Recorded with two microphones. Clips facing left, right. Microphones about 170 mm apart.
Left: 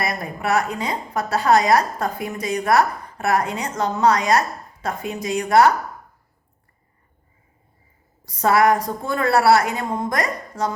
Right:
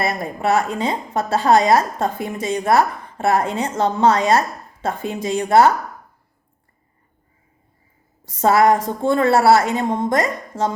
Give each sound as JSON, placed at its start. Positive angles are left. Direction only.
{"t": 0.0, "sound": "a woman's voice", "side_deg": -25}
{"t": 8.2, "sound": "a woman's voice", "side_deg": -25}